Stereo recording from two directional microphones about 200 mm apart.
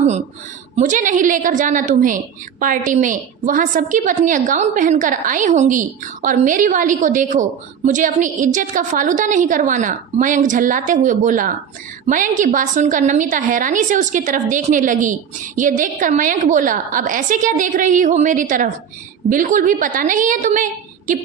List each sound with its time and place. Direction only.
0.8 s a woman's voice: 40° right (ahead or behind)